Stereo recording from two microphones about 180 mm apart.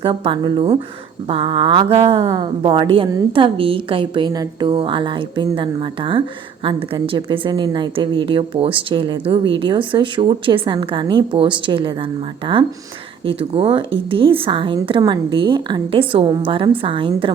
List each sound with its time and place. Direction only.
0.0 s speech: 25° right (ahead or behind)